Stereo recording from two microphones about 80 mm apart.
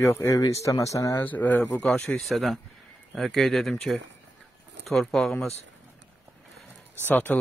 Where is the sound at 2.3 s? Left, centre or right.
Centre.